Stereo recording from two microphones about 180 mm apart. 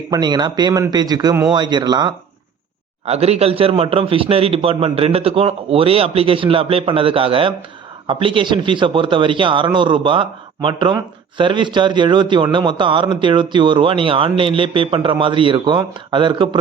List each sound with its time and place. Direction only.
0.1 s a man's voice: 25° right (ahead or behind)
3.1 s a man's voice: 35° right (ahead or behind)